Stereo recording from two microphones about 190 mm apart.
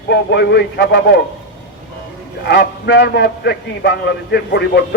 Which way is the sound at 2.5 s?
65° left (ahead or behind).